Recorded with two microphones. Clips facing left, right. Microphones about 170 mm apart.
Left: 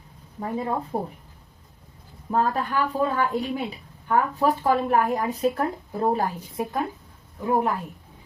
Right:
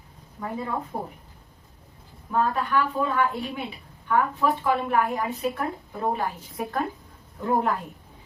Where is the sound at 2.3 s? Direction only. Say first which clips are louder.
Left 1 dB; 35° left (ahead or behind).